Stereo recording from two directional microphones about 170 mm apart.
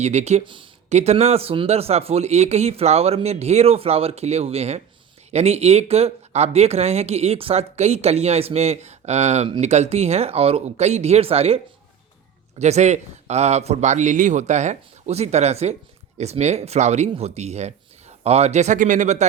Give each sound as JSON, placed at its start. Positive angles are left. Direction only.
{"t": 0.0, "sound": "speech", "side_deg": -40}